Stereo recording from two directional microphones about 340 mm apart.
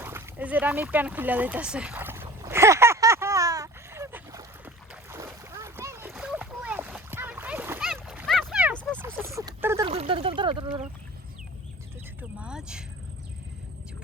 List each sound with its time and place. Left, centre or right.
0.0 s speech: centre
2.2 s a sound: centre
5.1 s splash: centre
12.4 s vehicle: centre